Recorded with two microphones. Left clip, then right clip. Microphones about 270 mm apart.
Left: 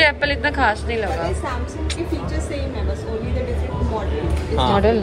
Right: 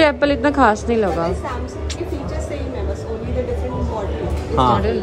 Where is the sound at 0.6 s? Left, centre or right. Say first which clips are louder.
Right 6 dB; right.